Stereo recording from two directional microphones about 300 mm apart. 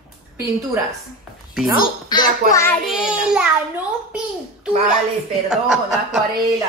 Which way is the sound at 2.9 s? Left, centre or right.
Centre.